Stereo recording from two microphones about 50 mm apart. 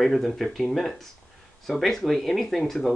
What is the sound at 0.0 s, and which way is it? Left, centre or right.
Speech, centre.